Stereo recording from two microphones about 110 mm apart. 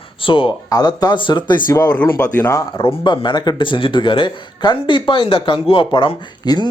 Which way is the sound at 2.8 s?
50° left (ahead or behind).